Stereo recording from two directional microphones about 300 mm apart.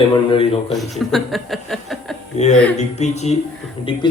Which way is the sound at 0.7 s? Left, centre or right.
Centre.